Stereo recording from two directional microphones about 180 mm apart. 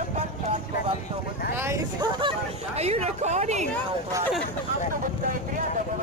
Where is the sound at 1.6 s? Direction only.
15° right (ahead or behind).